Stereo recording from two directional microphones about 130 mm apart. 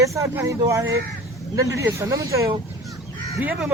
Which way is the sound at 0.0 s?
25° right (ahead or behind).